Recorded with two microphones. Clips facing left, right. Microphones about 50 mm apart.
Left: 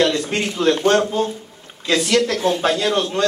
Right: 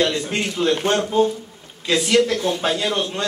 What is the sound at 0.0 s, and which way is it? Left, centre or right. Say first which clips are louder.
A man's voice: left 2 dB; centre.